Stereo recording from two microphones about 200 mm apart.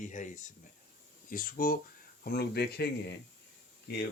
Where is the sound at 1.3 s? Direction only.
45° left (ahead or behind).